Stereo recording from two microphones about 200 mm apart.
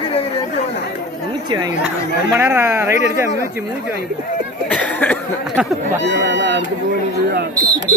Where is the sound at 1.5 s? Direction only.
20° right (ahead or behind).